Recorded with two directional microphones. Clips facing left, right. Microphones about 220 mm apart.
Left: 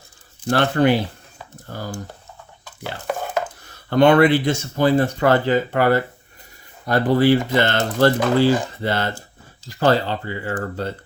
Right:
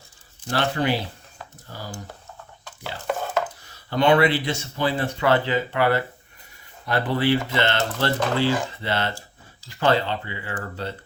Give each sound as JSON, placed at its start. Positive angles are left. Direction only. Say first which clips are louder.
{"t": 0.5, "sound": "speech", "louder": "left 6 dB", "side_deg": 55}
{"t": 3.8, "sound": "speech", "louder": "left 5 dB", "side_deg": 50}